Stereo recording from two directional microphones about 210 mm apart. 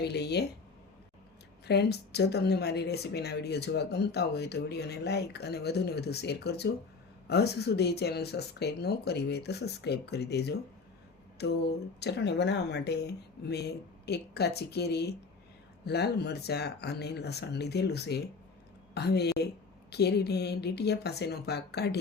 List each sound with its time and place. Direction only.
0.0 s a woman's voice: 50° left (ahead or behind)
1.6 s a woman's voice: 50° left (ahead or behind)